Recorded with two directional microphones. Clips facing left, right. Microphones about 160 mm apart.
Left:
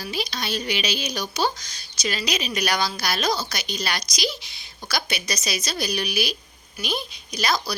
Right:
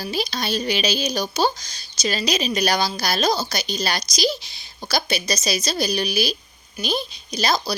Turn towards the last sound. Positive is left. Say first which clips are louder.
# right 3 dB
turn(degrees=-25)  # may be behind; listen again after turning